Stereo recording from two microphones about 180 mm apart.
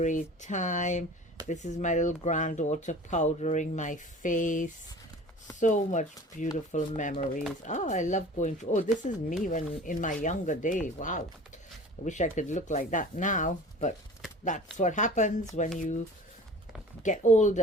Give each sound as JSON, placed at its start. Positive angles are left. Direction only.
{"t": 0.0, "sound": "speech", "side_deg": 40}
{"t": 17.0, "sound": "speech", "side_deg": 45}